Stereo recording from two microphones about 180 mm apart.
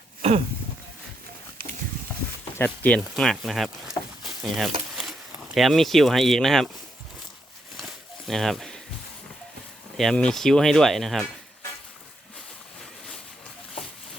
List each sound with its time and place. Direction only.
0.2 s a sound: 35° right (ahead or behind)
2.4 s speech: 10° left (ahead or behind)
8.3 s speech: centre (ahead or behind)
10.0 s speech: 5° left (ahead or behind)